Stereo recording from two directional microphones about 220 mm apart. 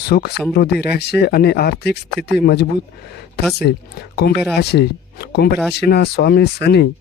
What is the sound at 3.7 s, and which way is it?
Speech, 50° left (ahead or behind).